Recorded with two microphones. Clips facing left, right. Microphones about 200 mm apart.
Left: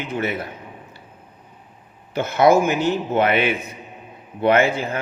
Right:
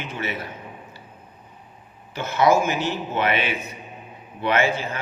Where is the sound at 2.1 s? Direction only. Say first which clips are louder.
Left 4 dB; 55° left (ahead or behind).